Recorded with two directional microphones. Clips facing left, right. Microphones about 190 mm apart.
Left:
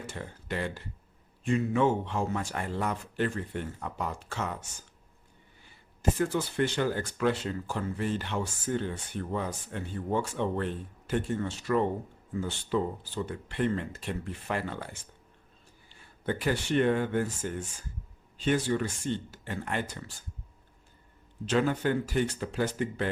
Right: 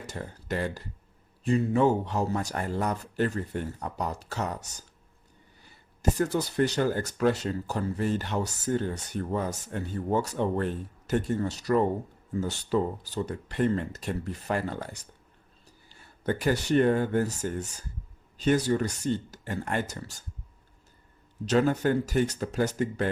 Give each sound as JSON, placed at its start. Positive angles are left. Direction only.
{"t": 0.0, "sound": "speech", "side_deg": -40}
{"t": 21.4, "sound": "speech", "side_deg": -40}